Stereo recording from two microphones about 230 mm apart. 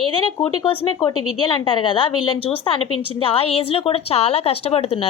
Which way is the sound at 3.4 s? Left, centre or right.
Left.